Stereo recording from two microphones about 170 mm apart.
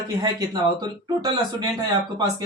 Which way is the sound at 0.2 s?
20° right (ahead or behind).